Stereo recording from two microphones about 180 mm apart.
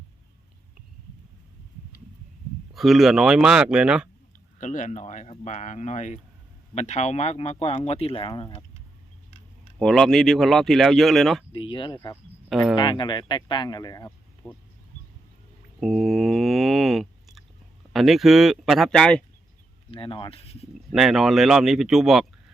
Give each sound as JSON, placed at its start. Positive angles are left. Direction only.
{"t": 2.7, "sound": "speech", "side_deg": 0}
{"t": 4.6, "sound": "speech", "side_deg": 45}
{"t": 9.8, "sound": "speech", "side_deg": 0}
{"t": 11.5, "sound": "speech", "side_deg": 25}
{"t": 15.8, "sound": "a sound", "side_deg": 0}
{"t": 17.9, "sound": "speech", "side_deg": 0}
{"t": 19.9, "sound": "speech", "side_deg": 30}
{"t": 20.9, "sound": "speech", "side_deg": 0}